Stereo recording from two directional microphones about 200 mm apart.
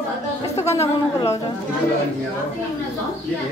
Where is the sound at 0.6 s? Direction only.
15° left (ahead or behind).